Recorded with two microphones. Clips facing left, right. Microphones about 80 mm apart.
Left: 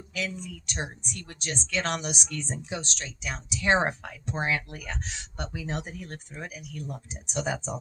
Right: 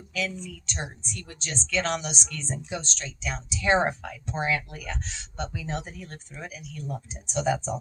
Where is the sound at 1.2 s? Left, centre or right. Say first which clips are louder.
Left 2 dB; left.